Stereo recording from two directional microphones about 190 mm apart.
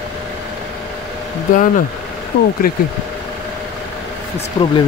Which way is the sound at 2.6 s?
50° left (ahead or behind).